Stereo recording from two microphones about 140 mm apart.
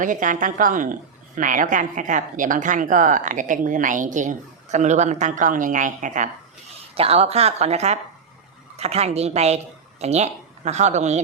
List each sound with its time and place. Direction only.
0.0 s a woman's voice: 70° right (ahead or behind)
6.9 s speech: 45° right (ahead or behind)